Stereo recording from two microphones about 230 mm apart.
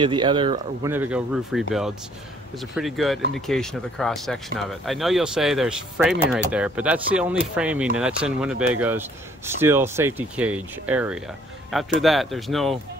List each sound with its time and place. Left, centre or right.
0.0 s speech: centre
0.9 s speech: centre